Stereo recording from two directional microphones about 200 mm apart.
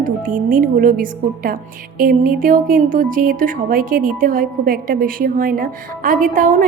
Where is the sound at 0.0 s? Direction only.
45° right (ahead or behind).